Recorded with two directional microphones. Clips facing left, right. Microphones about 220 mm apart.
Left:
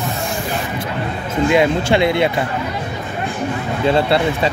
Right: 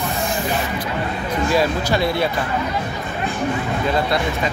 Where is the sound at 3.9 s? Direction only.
30° left (ahead or behind).